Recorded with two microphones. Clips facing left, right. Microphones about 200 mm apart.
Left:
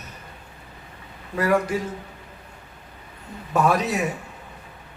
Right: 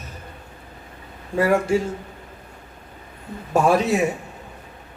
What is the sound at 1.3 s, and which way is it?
Speech, 25° right (ahead or behind).